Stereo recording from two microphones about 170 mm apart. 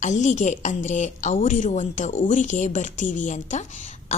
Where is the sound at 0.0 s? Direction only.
45° left (ahead or behind).